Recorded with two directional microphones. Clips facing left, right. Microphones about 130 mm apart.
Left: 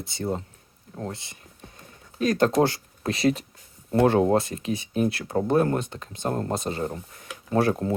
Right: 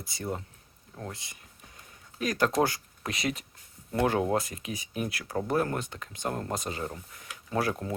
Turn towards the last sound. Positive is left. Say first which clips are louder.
# left 7 dB
turn(degrees=30)  # may be behind; listen again after turning